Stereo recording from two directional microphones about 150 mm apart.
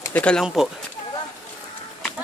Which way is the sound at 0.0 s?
10° left (ahead or behind).